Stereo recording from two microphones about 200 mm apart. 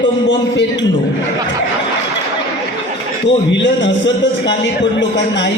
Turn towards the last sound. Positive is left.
turn(degrees=60)  # may be behind; listen again after turning